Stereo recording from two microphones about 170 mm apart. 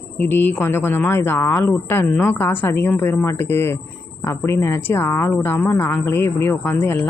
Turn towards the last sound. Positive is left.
turn(degrees=15)  # may be behind; listen again after turning